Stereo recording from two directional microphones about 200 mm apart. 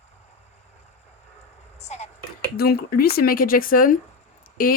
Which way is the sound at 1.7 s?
35° left (ahead or behind).